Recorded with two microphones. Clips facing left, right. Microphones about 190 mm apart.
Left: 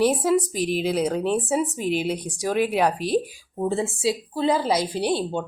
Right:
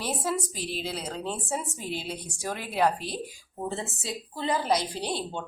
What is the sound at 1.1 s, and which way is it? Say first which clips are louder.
Speech: left 11 dB; 80° left.